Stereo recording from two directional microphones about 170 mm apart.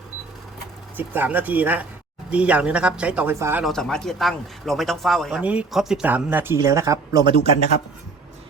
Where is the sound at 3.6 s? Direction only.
5° left (ahead or behind); by 7.4 s 20° right (ahead or behind).